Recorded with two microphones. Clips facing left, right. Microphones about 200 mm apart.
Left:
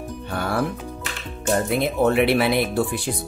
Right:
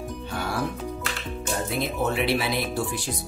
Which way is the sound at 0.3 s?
55° left (ahead or behind).